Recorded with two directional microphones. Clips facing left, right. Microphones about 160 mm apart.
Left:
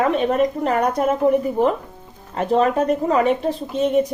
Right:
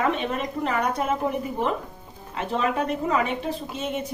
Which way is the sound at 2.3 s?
40° left (ahead or behind).